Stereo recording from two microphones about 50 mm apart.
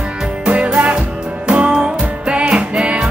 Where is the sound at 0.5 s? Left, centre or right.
Right.